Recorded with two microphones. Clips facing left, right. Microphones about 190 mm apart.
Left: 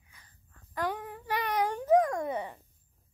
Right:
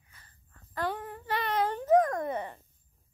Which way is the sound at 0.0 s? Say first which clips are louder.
Even; 15° left (ahead or behind).